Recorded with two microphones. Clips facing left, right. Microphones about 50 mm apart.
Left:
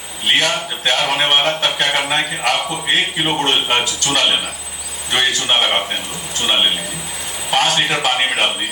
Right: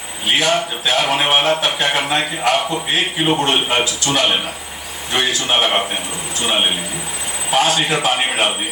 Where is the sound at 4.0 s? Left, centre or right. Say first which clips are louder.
Even; left.